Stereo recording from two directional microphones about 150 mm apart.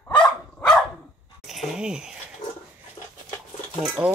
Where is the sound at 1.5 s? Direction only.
Centre (ahead or behind).